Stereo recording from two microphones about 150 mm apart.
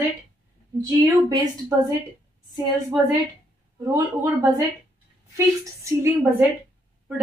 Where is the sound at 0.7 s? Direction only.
20° right (ahead or behind).